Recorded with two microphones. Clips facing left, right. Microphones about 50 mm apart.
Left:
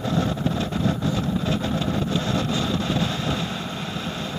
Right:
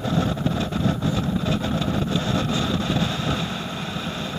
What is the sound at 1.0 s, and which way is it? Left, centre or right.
Vehicle, right.